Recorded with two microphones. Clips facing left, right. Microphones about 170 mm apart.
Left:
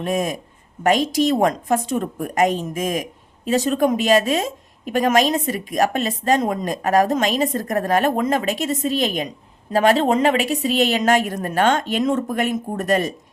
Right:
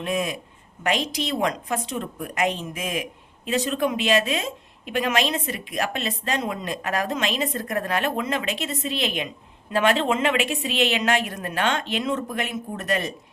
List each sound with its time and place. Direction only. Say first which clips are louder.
0.0 s a woman's voice: left 4 dB; 45° left (ahead or behind)